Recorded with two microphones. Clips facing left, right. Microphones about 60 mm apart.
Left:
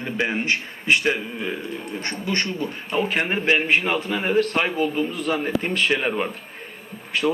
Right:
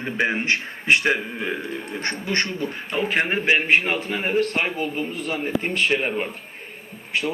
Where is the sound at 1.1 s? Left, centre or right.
Right.